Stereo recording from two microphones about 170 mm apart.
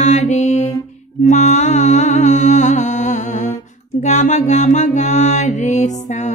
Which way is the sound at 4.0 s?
45° left (ahead or behind).